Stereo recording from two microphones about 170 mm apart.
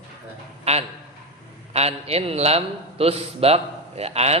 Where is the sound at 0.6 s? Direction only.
40° right (ahead or behind).